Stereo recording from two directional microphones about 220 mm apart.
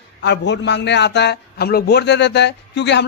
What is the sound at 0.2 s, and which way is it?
A man's voice, 50° left (ahead or behind).